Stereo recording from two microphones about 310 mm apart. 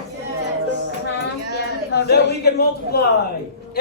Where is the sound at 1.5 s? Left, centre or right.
Left.